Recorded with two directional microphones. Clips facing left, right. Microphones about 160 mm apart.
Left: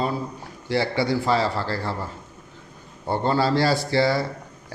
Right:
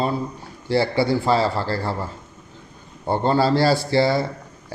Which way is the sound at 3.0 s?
30° right (ahead or behind).